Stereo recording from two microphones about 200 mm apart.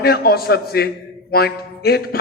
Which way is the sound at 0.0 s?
50° left (ahead or behind).